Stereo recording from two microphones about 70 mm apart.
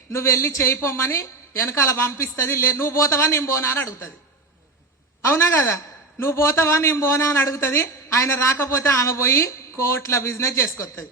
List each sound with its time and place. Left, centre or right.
0.1 s a woman's voice: left
5.2 s a woman's voice: left